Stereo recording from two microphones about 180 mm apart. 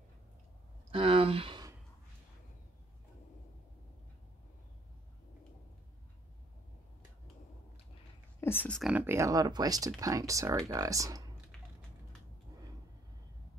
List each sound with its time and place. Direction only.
0.9 s a sound: 30° right (ahead or behind)
8.4 s speech: 10° left (ahead or behind)
8.9 s speech: 15° right (ahead or behind)